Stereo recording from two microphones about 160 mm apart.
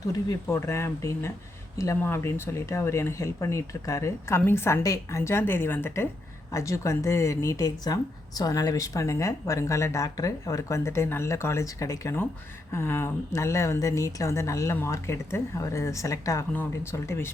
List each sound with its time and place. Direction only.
0.1 s speech: 20° left (ahead or behind)